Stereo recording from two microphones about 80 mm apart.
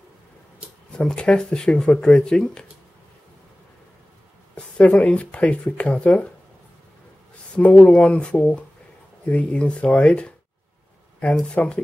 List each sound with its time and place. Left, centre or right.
0.9 s speech: centre
4.6 s speech: centre
7.5 s speech: centre